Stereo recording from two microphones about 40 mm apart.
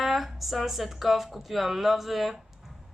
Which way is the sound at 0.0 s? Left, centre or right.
Centre.